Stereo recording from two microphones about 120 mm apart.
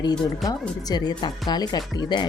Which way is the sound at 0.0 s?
35° left (ahead or behind).